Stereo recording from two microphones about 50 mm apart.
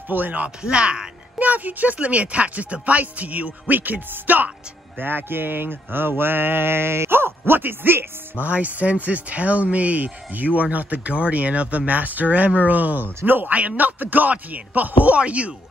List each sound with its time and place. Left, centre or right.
0.1 s speech: right
1.5 s speech: right
4.9 s mantra: right
8.5 s speech: right